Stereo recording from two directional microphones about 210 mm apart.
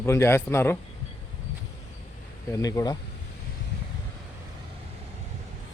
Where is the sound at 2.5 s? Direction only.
15° left (ahead or behind).